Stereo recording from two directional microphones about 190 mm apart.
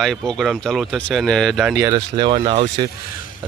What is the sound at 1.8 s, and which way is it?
Speech, 20° right (ahead or behind).